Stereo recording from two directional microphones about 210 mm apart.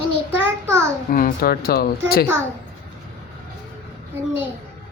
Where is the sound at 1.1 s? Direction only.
40° left (ahead or behind).